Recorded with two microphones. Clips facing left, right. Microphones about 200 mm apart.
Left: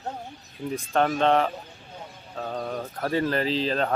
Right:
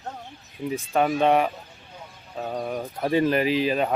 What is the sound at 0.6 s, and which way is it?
Speech, 5° right (ahead or behind).